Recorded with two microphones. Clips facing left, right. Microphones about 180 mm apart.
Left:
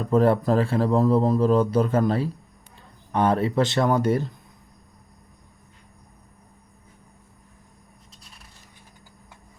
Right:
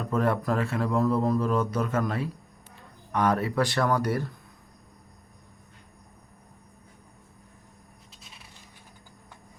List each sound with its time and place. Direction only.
0.0 s speech: 30° left (ahead or behind)